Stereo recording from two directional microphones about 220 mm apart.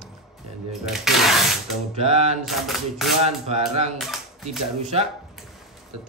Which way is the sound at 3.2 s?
30° right (ahead or behind).